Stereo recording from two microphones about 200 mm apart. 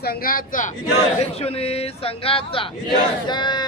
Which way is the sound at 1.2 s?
30° left (ahead or behind).